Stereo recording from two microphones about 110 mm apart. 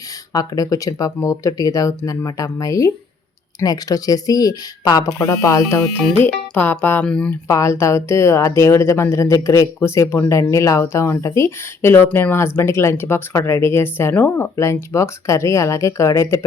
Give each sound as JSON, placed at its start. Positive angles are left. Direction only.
{"t": 0.3, "sound": "speech", "side_deg": 35}
{"t": 7.4, "sound": "speech", "side_deg": 30}